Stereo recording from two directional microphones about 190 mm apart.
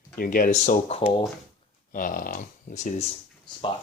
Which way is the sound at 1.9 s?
45° left (ahead or behind).